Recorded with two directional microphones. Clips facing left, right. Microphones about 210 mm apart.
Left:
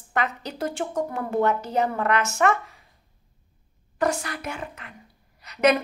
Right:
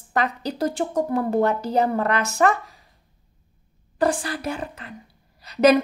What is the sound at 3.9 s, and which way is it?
Speech, 30° right (ahead or behind).